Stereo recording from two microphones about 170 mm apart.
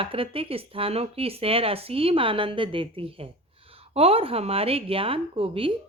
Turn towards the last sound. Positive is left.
turn(degrees=-35)  # may be behind; listen again after turning